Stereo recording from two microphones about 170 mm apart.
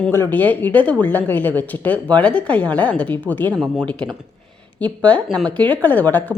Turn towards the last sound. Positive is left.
turn(degrees=10)  # may be behind; listen again after turning